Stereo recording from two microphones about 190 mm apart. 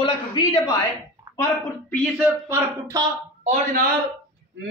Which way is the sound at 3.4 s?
40° right (ahead or behind).